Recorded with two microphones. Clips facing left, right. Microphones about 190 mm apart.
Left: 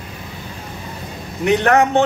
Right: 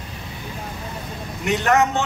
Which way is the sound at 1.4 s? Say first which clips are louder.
Left 4 dB; 60° left (ahead or behind).